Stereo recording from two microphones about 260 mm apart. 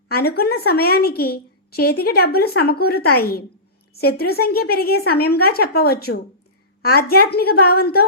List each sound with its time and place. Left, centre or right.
0.1 s a woman's voice: left